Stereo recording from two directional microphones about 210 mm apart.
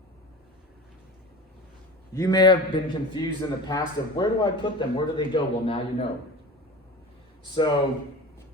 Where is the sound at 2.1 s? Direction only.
15° left (ahead or behind).